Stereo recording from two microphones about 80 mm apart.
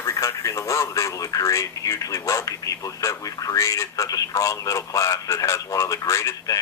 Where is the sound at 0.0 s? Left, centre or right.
Left.